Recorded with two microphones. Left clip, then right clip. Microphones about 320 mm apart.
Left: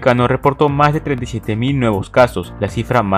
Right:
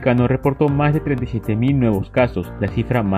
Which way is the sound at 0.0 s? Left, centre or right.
Left.